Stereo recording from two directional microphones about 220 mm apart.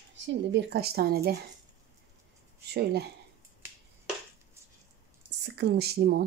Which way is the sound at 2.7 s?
50° right (ahead or behind).